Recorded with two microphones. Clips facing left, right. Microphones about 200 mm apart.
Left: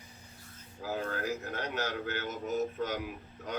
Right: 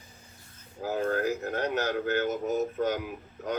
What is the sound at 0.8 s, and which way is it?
A man's voice, 45° right (ahead or behind).